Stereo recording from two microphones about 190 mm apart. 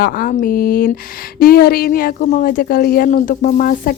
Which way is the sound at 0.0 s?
50° left (ahead or behind).